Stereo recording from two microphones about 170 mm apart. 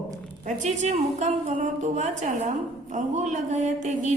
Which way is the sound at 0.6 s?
40° right (ahead or behind).